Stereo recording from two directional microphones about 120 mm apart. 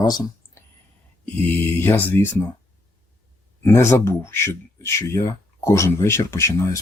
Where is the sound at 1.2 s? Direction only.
15° left (ahead or behind).